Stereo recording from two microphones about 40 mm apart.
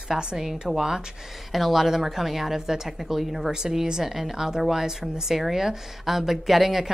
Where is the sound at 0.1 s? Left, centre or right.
Centre.